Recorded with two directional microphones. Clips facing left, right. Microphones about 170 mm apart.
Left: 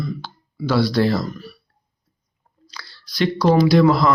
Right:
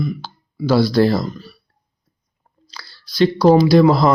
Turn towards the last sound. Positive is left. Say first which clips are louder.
# right 2 dB
turn(degrees=-35)  # may be behind; listen again after turning